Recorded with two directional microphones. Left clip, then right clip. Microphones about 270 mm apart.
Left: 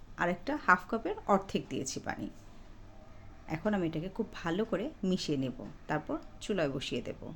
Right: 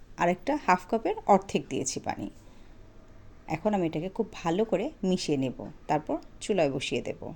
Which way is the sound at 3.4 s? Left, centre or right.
Centre.